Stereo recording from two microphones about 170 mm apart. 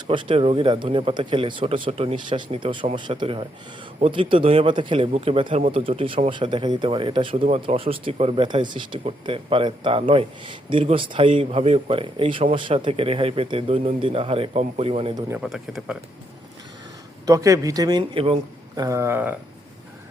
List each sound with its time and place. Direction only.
0.1 s a man's voice: 30° right (ahead or behind)
7.4 s speech: 40° right (ahead or behind)
15.4 s speech: centre (ahead or behind)
17.2 s a man's voice: 20° right (ahead or behind)
18.8 s speech: 15° right (ahead or behind)